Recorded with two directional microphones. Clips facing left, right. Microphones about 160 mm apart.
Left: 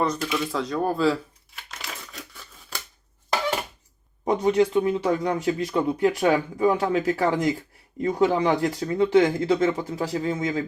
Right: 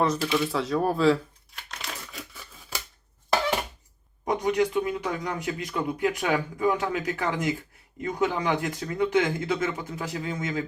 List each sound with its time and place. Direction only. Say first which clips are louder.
0.0 s speech: even; 5° right (ahead or behind)
0.3 s crumpling: right 1 dB; centre (ahead or behind)
4.3 s speech: left 4 dB; 30° left (ahead or behind)